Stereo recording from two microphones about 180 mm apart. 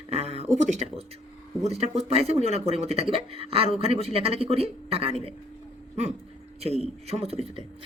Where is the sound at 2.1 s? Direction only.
35° right (ahead or behind).